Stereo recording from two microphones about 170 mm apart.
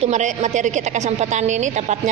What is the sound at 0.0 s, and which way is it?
A woman's voice, 45° right (ahead or behind).